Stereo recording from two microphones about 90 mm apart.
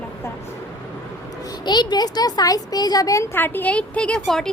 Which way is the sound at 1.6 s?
50° left (ahead or behind).